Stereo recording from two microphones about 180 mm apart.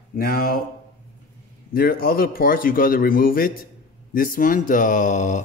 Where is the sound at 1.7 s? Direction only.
55° left (ahead or behind).